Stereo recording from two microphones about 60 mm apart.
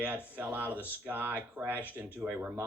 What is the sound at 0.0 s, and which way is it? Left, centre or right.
Speech, right.